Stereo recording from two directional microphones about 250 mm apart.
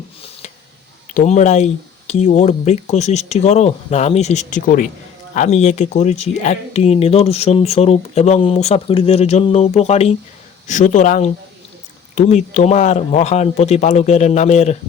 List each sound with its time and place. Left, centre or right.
1.1 s speech: left